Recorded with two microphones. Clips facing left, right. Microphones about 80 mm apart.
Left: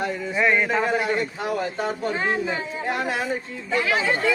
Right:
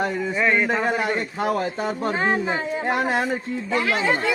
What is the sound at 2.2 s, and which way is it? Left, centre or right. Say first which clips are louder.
Speech: right 4 dB; right.